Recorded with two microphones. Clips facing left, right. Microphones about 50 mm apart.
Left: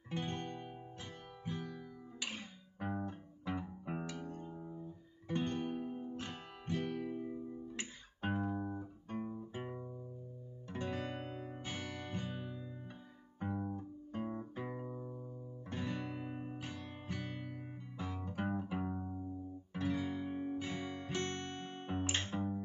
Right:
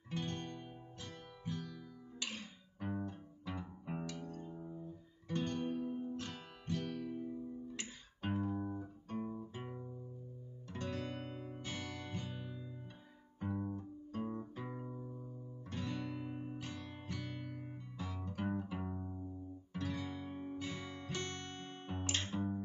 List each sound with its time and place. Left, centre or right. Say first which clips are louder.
0.1 s guitar: left 2 dB; centre
6.1 s music: even; centre
9.1 s music: left 1 dB; centre